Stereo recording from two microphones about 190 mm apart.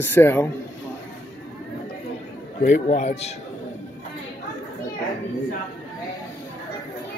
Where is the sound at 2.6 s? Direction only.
40° left (ahead or behind).